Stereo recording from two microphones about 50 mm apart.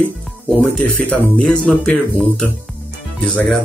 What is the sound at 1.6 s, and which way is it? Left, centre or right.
Speech, centre.